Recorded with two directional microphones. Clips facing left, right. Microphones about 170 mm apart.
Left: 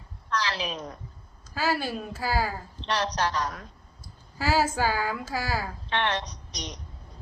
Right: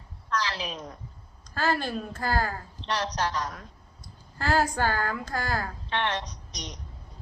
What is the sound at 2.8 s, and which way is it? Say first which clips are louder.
Speech: left 2 dB; 75° left (ahead or behind).